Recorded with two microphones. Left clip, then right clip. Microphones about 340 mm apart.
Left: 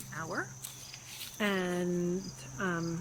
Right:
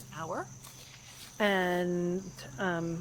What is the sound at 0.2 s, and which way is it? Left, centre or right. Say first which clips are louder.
Speech: even; centre.